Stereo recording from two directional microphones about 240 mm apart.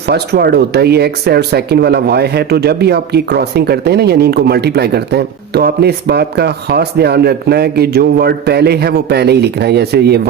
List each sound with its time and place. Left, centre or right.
0.1 s speech: right